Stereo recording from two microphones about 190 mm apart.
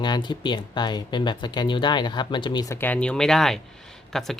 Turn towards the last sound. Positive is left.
turn(degrees=0)  # may be behind; listen again after turning